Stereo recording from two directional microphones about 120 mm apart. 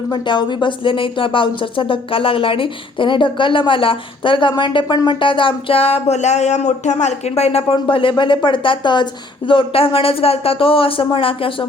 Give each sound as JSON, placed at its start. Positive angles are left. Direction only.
{"t": 0.1, "sound": "speech", "side_deg": 40}